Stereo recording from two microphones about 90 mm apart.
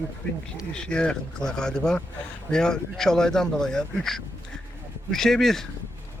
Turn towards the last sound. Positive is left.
turn(degrees=5)  # may be behind; listen again after turning